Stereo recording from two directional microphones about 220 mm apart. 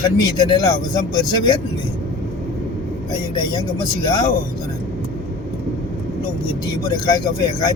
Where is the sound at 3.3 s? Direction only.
20° left (ahead or behind).